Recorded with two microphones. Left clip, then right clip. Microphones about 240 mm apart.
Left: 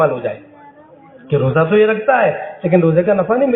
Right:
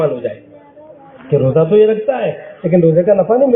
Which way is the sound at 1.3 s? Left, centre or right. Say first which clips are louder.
Right 3 dB; centre.